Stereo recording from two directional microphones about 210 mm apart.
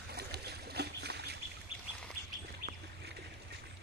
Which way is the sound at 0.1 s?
50° right (ahead or behind).